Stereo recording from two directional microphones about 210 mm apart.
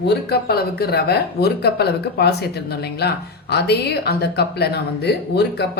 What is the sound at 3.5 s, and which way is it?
Speech, 50° left (ahead or behind).